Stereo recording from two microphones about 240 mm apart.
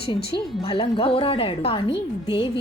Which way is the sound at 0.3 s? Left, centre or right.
Left.